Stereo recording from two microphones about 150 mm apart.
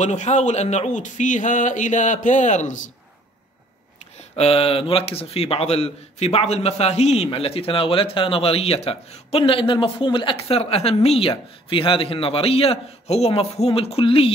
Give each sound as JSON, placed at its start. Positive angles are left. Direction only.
{"t": 0.0, "sound": "speech", "side_deg": 50}
{"t": 4.4, "sound": "a man's voice", "side_deg": 40}